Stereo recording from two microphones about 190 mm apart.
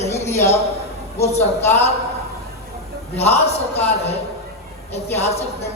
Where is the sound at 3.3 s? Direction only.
35° left (ahead or behind).